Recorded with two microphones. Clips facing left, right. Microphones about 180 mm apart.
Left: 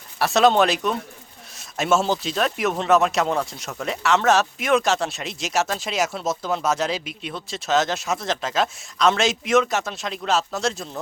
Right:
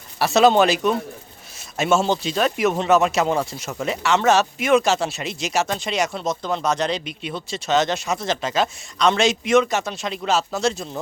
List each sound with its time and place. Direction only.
0.2 s speech: centre (ahead or behind)